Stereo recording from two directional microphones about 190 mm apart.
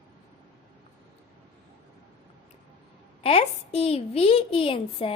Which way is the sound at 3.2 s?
30° left (ahead or behind).